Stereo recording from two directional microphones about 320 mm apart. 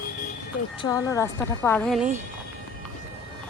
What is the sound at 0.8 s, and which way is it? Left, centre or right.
A woman's voice, centre.